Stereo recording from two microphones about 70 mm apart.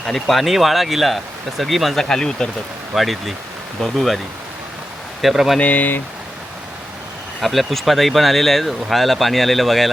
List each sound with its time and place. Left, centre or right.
0.1 s speech: centre
2.9 s speech: centre
5.2 s speech: centre
5.5 s speech: left
7.4 s speech: centre